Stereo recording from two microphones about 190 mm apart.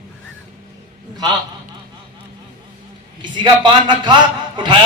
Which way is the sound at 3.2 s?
25° right (ahead or behind).